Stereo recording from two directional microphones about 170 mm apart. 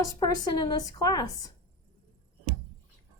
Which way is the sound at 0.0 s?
25° left (ahead or behind).